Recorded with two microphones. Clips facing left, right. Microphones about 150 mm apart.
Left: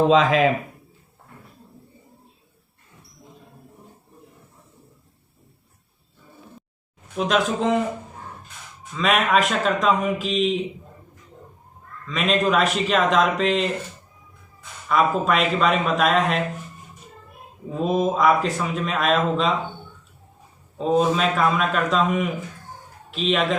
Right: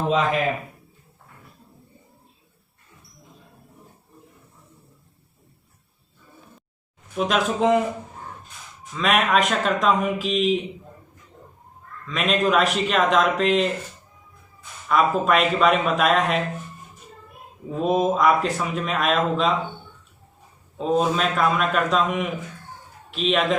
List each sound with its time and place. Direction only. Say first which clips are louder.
0.1 s speech: left 5 dB; 90° left
7.2 s speech: even; centre (ahead or behind)
9.0 s speech: even; centre (ahead or behind)
12.0 s speech: even; centre (ahead or behind)
14.8 s speech: even; centre (ahead or behind)
17.7 s speech: right 1 dB; centre (ahead or behind)
20.7 s speech: left 2 dB; centre (ahead or behind)